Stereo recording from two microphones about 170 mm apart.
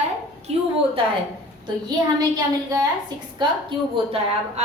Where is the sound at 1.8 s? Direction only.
20° right (ahead or behind).